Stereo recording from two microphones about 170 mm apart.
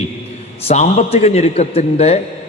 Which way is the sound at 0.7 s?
40° left (ahead or behind).